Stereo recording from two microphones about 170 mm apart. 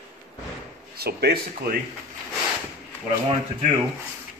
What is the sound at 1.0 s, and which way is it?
Speech, 70° right (ahead or behind).